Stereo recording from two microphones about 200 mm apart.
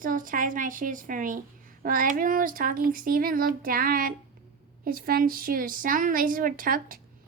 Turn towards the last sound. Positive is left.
turn(degrees=-45)  # may be behind; listen again after turning